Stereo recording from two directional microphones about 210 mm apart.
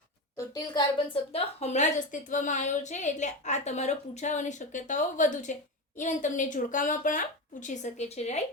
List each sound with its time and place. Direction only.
0.3 s a woman's voice: 20° left (ahead or behind)